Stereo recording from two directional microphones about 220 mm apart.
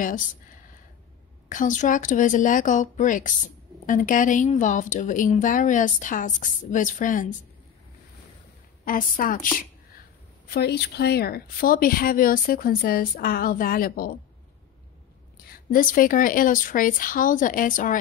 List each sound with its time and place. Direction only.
1.5 s a woman's voice: 35° left (ahead or behind)
8.8 s a woman's voice: 40° left (ahead or behind)
10.5 s a woman's voice: 45° left (ahead or behind)
15.5 s a woman's voice: 40° left (ahead or behind)